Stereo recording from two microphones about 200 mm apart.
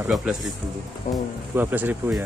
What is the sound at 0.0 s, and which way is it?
Speech, 5° right (ahead or behind).